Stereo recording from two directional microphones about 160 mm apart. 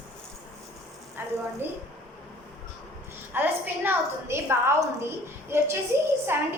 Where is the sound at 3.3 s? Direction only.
10° right (ahead or behind).